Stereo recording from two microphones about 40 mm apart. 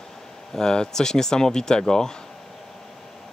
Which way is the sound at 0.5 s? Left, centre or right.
Centre.